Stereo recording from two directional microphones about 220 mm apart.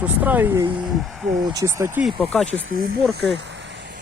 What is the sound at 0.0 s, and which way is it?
Speech, 5° right (ahead or behind).